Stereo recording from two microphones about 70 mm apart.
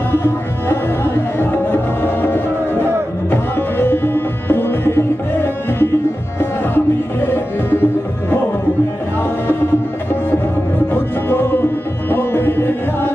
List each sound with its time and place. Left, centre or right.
0.1 s music: left
10.9 s music: left